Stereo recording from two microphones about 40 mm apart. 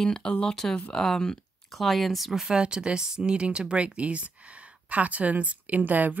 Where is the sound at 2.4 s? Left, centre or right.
Right.